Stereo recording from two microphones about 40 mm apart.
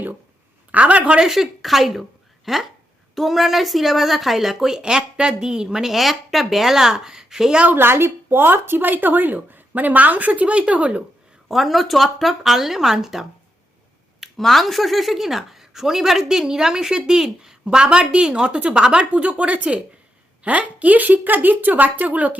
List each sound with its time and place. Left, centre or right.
0.7 s a woman's voice: right
1.3 s a woman's voice: centre
4.8 s speech: centre
7.8 s speech: right
11.4 s speech: centre
14.2 s speech: centre; by 22.4 s right